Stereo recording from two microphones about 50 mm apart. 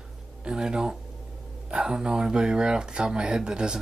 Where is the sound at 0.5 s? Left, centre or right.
Centre.